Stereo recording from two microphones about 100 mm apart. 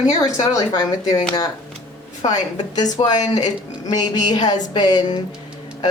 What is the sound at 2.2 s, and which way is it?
A woman's voice, 40° left (ahead or behind).